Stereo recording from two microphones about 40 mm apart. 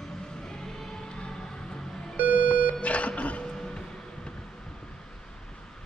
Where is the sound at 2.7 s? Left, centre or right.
Left.